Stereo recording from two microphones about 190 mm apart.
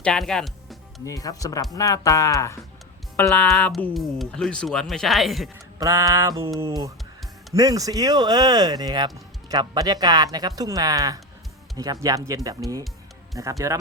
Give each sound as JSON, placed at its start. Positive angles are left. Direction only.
{"t": 0.0, "sound": "music", "side_deg": 5}
{"t": 1.0, "sound": "speech", "side_deg": 20}
{"t": 5.8, "sound": "speech", "side_deg": -15}